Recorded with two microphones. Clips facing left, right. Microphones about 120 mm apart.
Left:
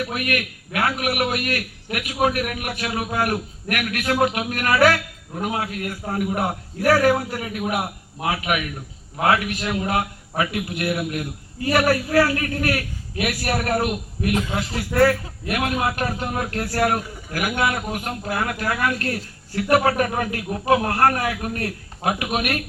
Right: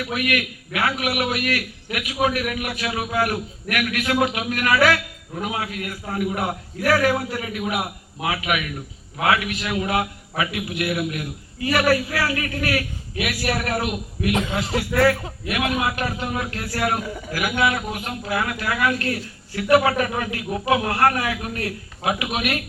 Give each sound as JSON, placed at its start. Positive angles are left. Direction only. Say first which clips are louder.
{"t": 0.1, "sound": "a man's voice", "louder": "right 1 dB", "side_deg": 45}
{"t": 15.4, "sound": "a man's voice", "louder": "left 1 dB", "side_deg": 40}